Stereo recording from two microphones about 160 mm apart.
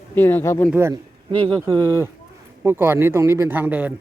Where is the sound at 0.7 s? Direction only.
15° right (ahead or behind).